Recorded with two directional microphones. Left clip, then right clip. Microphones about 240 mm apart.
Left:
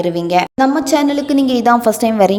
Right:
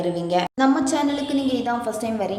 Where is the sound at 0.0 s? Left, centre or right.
Left.